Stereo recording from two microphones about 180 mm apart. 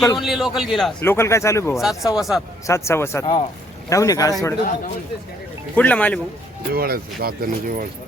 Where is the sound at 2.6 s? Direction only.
15° left (ahead or behind).